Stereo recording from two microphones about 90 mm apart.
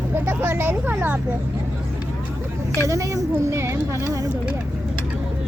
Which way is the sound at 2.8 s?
35° right (ahead or behind).